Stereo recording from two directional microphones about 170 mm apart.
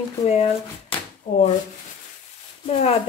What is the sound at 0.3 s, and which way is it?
Speech, 35° left (ahead or behind).